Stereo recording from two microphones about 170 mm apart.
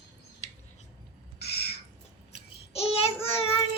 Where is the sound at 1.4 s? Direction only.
70° left (ahead or behind).